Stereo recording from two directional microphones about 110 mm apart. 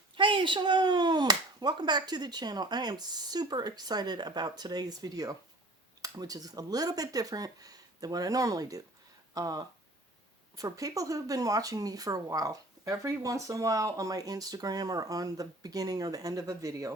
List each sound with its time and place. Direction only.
0.2 s speech: 50° right (ahead or behind); by 16.9 s 30° right (ahead or behind)